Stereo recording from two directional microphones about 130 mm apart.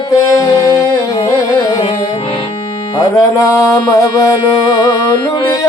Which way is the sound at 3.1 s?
25° left (ahead or behind).